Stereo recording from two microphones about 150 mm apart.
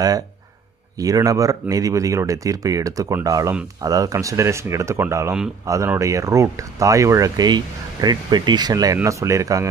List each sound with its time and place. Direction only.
0.9 s speech: 25° right (ahead or behind)